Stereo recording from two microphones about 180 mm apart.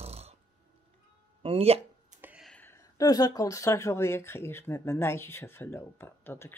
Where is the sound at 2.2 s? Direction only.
10° right (ahead or behind).